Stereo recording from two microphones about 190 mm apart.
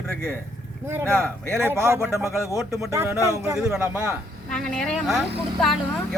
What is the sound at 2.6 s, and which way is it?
Speech, 15° right (ahead or behind).